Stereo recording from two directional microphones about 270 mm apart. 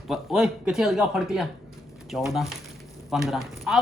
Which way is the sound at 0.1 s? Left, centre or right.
Centre.